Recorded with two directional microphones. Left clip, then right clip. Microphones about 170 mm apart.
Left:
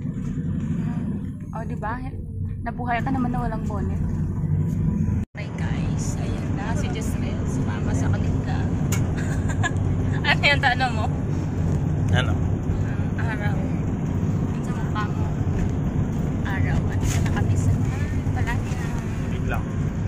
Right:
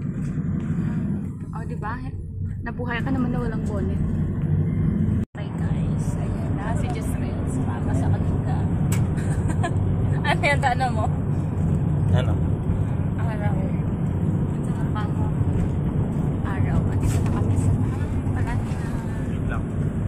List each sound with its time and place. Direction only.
10.2 s speech: 40° right (ahead or behind)